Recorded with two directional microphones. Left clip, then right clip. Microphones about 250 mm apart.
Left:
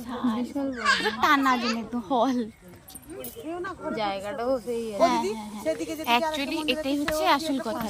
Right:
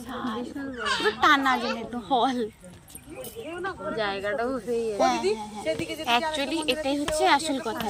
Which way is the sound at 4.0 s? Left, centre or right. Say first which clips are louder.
Right 2 dB; left.